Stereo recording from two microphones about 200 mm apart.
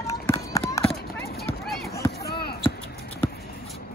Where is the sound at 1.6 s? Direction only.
Centre (ahead or behind).